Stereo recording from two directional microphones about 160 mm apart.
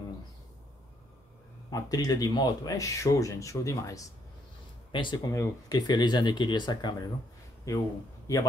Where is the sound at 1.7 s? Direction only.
25° left (ahead or behind).